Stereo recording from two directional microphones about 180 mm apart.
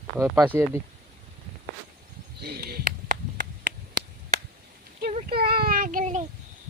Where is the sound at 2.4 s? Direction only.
60° right (ahead or behind).